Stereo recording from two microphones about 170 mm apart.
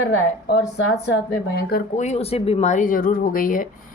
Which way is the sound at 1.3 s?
65° left (ahead or behind).